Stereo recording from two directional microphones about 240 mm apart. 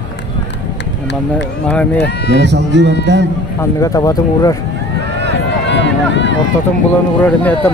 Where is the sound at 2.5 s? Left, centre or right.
Right.